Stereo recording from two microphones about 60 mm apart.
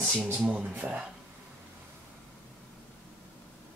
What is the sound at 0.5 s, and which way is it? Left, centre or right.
Speech, right.